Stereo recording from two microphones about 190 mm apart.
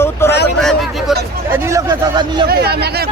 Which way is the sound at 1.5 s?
15° right (ahead or behind).